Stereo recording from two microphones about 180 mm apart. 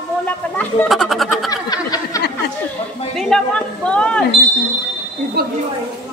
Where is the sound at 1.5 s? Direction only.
20° left (ahead or behind).